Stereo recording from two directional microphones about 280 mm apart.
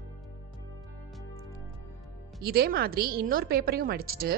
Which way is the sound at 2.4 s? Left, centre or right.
Right.